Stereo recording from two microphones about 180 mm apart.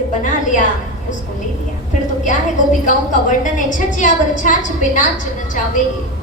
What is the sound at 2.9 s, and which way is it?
A woman's voice, 45° left (ahead or behind).